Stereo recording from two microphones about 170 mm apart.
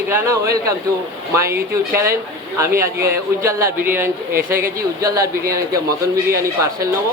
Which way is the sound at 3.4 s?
15° right (ahead or behind).